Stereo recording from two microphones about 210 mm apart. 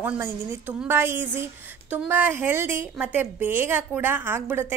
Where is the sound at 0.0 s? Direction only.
10° right (ahead or behind).